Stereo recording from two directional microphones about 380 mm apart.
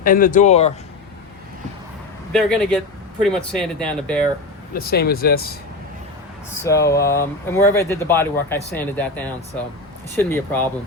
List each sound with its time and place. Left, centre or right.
0.0 s speech: left
2.3 s speech: centre
4.7 s speech: left
6.7 s speech: centre